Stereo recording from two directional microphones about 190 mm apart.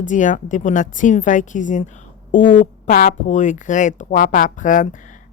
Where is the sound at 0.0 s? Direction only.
40° left (ahead or behind).